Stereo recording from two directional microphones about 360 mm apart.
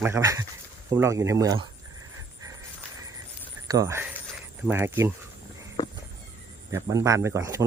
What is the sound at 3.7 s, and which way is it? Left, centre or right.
Speech, centre.